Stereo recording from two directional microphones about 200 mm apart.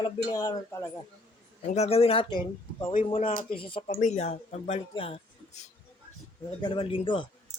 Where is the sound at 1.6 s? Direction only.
35° left (ahead or behind).